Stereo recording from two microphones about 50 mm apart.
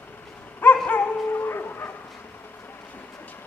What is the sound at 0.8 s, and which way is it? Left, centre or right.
Dog, left.